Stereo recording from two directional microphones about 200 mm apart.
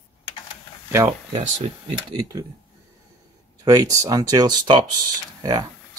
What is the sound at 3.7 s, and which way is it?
Speech, 15° right (ahead or behind).